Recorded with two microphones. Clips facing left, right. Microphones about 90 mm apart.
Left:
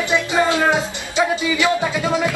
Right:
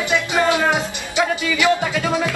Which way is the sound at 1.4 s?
20° left (ahead or behind).